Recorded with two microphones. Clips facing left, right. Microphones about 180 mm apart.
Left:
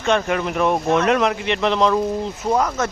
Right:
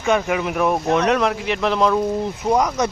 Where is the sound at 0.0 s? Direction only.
5° right (ahead or behind).